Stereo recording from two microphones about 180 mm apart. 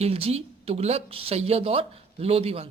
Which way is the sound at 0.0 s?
35° right (ahead or behind).